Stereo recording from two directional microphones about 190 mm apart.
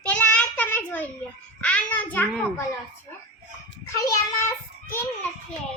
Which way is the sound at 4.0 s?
20° left (ahead or behind).